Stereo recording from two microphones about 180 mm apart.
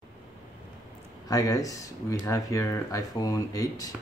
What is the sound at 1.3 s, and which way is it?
Speech, 20° left (ahead or behind).